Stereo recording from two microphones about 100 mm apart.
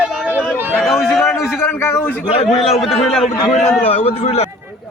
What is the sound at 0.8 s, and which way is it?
Speech, centre (ahead or behind).